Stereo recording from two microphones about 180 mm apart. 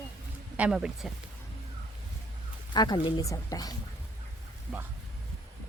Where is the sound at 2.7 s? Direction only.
25° left (ahead or behind).